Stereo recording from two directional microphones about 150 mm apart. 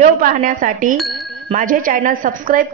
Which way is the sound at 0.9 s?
Centre (ahead or behind).